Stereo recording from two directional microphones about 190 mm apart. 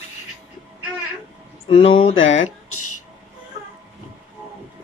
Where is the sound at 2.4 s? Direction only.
90° left.